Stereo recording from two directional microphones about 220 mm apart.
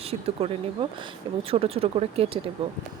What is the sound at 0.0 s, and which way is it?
Speech, 25° right (ahead or behind).